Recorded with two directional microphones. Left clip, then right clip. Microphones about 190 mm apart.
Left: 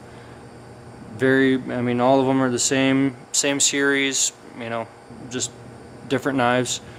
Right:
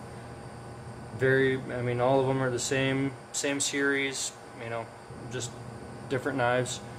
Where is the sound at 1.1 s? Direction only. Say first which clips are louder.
Left 7 dB; 55° left (ahead or behind).